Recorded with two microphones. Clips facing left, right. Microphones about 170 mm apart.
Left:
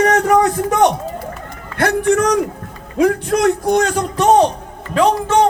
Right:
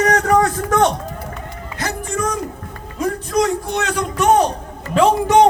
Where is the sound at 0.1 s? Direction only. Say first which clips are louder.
Left 2 dB; 15° left (ahead or behind).